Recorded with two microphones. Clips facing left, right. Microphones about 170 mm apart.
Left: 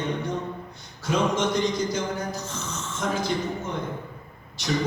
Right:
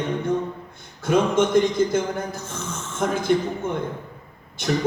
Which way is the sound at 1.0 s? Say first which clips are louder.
Right 5 dB; 55° right (ahead or behind).